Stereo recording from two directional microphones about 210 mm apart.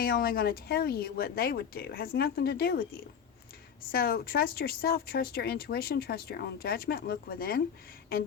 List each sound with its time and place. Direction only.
0.0 s speech: 45° left (ahead or behind)
3.9 s speech: 45° left (ahead or behind)